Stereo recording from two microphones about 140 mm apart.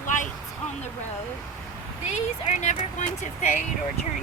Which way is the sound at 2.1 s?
55° left (ahead or behind).